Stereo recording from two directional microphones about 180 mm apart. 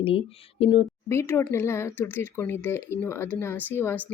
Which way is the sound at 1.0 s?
15° left (ahead or behind).